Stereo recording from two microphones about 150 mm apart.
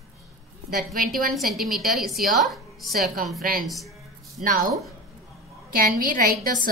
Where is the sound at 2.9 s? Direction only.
85° right.